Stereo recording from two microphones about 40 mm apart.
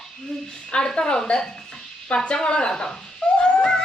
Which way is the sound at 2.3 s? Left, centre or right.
Left.